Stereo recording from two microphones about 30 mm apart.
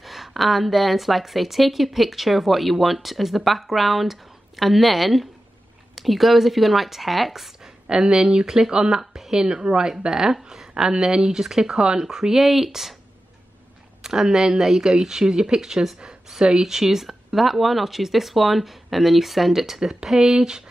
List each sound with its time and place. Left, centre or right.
0.0 s a woman's voice: centre
7.6 s a sound: right
8.3 s a woman's voice: right
14.0 s speech: centre
14.8 s a woman's voice: right
15.6 s a woman's voice: centre
20.3 s a woman's voice: right